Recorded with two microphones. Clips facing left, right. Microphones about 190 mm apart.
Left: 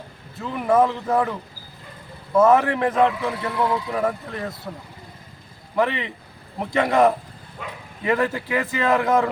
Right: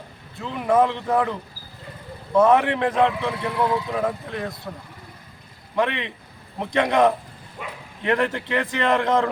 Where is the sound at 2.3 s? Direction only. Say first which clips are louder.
Left 1 dB; 5° left (ahead or behind).